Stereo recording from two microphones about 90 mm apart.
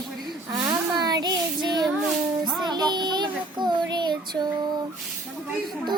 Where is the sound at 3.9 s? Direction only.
55° right (ahead or behind).